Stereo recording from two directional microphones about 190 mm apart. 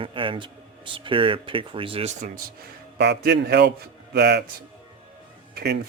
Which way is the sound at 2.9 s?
60° right (ahead or behind).